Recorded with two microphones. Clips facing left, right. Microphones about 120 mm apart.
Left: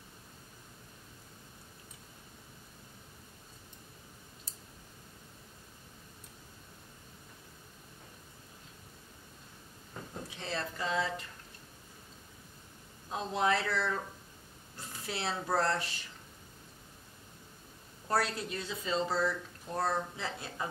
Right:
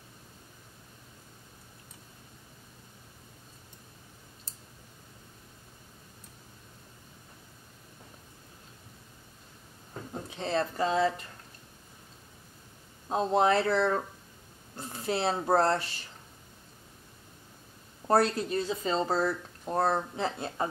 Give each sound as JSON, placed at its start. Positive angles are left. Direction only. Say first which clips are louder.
{"t": 10.3, "sound": "speech", "louder": "right 9 dB", "side_deg": -35}
{"t": 13.1, "sound": "speech", "louder": "right 7 dB", "side_deg": -40}
{"t": 18.0, "sound": "speech", "louder": "right 7 dB", "side_deg": -40}
{"t": 20.2, "sound": "speech", "louder": "right 7 dB", "side_deg": -25}